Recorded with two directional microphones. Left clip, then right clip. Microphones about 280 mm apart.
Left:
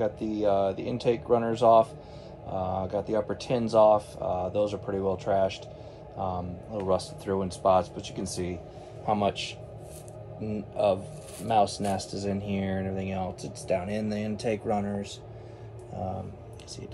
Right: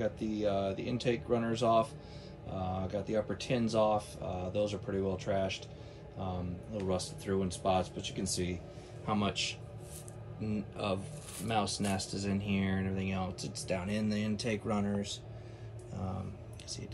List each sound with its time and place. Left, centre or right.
0.0 s speech: centre
9.0 s speech: centre